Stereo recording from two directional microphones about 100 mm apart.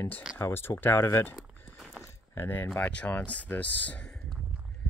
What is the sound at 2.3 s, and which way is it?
Speech, 25° left (ahead or behind).